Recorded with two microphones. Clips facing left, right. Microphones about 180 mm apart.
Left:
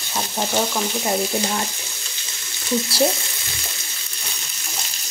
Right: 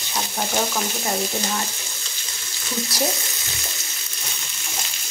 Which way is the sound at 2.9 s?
30° left (ahead or behind).